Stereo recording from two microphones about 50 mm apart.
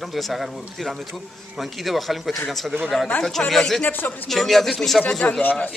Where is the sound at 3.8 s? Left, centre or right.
Left.